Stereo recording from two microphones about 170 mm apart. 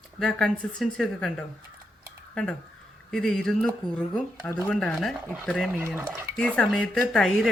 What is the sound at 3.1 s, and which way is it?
Speech, 5° left (ahead or behind).